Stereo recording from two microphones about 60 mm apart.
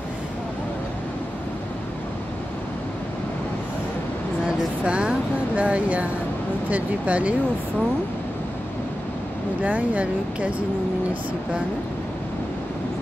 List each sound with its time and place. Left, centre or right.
4.8 s speech: centre
9.6 s speech: right